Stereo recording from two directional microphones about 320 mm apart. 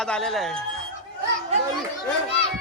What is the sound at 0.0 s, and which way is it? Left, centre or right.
Speech, centre.